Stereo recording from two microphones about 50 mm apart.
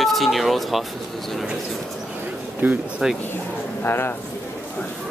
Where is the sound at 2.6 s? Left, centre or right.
Right.